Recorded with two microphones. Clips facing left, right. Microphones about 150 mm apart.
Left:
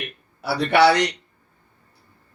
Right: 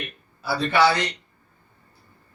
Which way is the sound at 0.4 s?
70° left (ahead or behind).